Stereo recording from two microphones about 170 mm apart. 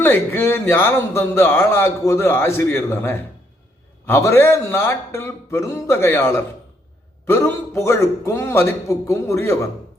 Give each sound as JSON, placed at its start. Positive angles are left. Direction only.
{"t": 0.0, "sound": "speech", "side_deg": 15}